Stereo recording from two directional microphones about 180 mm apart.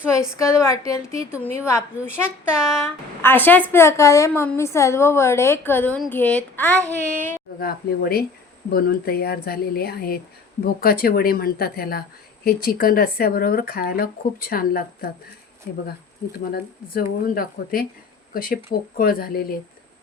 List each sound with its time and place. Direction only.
0.3 s a woman's voice: 15° left (ahead or behind)
2.0 s speech: 5° right (ahead or behind)
2.7 s a woman's voice: 10° left (ahead or behind)
6.7 s speech: 15° right (ahead or behind)
7.1 s a woman's voice: 10° left (ahead or behind)
7.6 s speech: 55° left (ahead or behind)
16.5 s speech: 55° left (ahead or behind)